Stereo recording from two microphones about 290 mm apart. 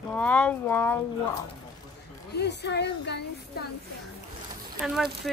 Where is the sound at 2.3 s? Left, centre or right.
Left.